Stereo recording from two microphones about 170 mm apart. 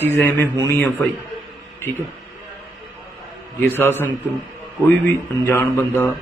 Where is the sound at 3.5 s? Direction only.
10° left (ahead or behind).